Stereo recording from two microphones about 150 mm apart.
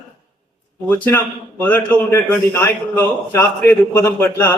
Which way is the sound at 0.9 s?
15° left (ahead or behind).